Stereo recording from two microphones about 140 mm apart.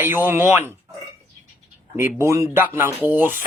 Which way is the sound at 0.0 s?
15° right (ahead or behind).